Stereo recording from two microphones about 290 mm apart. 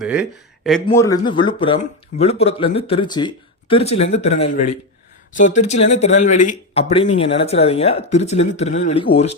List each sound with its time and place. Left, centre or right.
0.0 s speech: centre
0.9 s speech: centre